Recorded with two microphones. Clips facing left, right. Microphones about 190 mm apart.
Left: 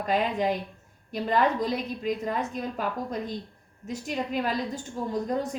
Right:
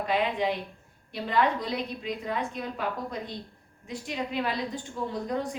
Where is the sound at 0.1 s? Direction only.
45° left (ahead or behind).